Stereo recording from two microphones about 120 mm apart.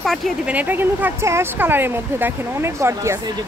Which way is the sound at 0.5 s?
15° right (ahead or behind).